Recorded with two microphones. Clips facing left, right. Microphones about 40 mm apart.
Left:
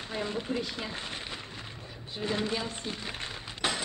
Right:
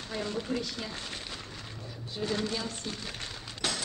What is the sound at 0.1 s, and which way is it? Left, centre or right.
Speech, left.